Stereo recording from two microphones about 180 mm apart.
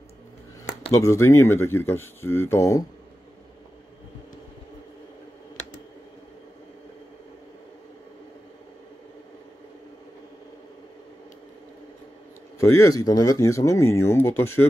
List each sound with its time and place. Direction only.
0.9 s speech: 15° left (ahead or behind)
12.5 s speech: 15° left (ahead or behind)